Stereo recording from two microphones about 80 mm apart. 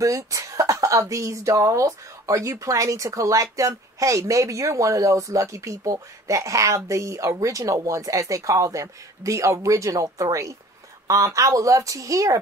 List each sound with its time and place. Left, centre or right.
0.0 s speech: right